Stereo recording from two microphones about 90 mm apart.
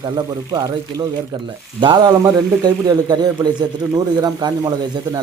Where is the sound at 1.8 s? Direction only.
60° right (ahead or behind).